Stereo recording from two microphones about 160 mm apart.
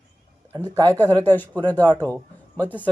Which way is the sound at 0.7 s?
25° right (ahead or behind).